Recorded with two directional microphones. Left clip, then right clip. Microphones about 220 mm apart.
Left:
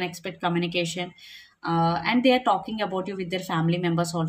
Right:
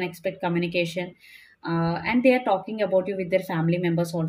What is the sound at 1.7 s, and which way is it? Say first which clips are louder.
Speech: left 3 dB; 25° left (ahead or behind).